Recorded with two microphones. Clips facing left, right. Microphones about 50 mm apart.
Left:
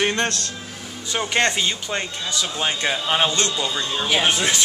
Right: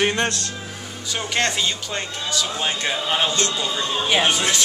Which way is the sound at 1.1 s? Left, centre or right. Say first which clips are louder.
Left 2 dB; centre.